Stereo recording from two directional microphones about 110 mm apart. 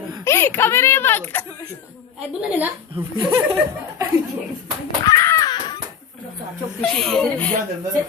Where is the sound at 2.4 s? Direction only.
15° right (ahead or behind).